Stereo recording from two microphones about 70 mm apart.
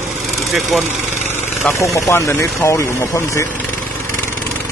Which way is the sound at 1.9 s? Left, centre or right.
Left.